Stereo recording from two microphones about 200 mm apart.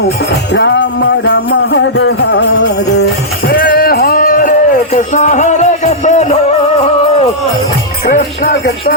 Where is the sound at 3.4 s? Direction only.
50° left (ahead or behind).